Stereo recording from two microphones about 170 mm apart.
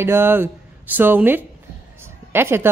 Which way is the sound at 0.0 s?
15° right (ahead or behind).